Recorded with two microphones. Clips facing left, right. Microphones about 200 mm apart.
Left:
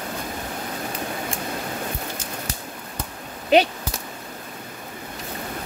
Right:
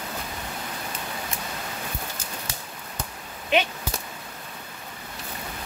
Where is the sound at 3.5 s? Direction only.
35° left (ahead or behind).